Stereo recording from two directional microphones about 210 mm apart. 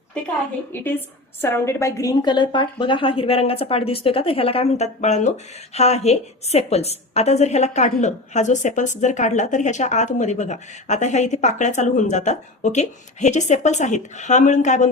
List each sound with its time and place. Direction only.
0.7 s a woman's voice: 10° left (ahead or behind); by 14.8 s 35° left (ahead or behind)